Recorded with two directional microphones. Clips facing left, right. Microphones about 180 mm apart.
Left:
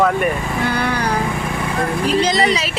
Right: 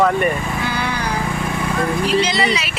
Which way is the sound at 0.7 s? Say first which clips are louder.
Left 5 dB; 60° left (ahead or behind).